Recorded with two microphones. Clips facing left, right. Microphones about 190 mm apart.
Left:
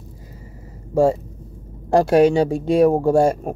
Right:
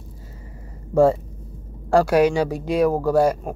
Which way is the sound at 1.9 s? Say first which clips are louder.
Left 2 dB; 25° left (ahead or behind).